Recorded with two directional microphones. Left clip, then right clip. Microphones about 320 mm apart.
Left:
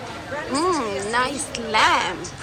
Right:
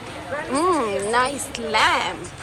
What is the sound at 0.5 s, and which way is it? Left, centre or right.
A child's voice, centre.